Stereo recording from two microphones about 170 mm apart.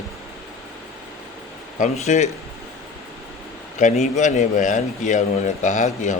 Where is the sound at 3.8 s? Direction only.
45° left (ahead or behind).